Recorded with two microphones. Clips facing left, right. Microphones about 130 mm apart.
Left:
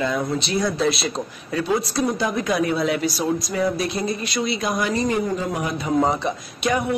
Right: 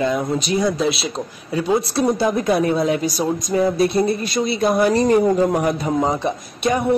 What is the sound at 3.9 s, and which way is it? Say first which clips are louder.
Speech: right 6 dB; 55° right (ahead or behind).